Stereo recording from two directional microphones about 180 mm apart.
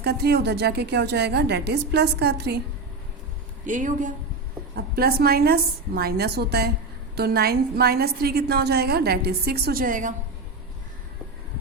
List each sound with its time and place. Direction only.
0.0 s a woman's voice: 65° right (ahead or behind)
3.7 s speech: 45° right (ahead or behind)
4.8 s a woman's voice: 55° right (ahead or behind)